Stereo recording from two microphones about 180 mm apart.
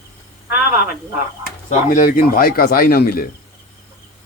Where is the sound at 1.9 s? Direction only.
50° left (ahead or behind).